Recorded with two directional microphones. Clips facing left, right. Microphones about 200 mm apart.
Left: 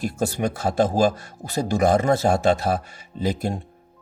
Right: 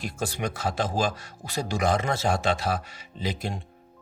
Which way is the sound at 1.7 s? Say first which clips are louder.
Left 7 dB; 45° left (ahead or behind).